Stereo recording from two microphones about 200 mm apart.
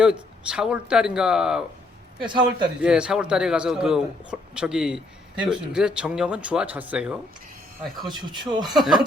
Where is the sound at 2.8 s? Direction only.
5° right (ahead or behind).